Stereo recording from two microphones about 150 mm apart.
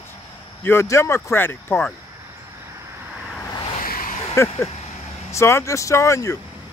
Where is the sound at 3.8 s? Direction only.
70° left (ahead or behind).